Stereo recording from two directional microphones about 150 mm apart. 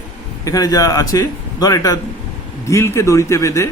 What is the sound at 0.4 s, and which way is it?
A man's voice, 25° left (ahead or behind).